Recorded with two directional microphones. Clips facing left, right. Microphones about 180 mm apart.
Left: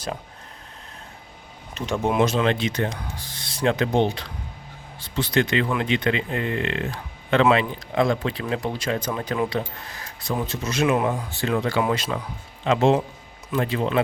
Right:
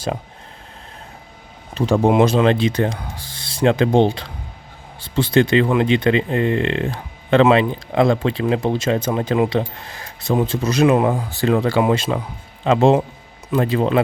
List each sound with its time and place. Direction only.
1.7 s speech: 35° right (ahead or behind)